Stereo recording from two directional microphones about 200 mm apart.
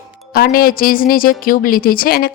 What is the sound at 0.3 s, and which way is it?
A woman's voice, 45° left (ahead or behind).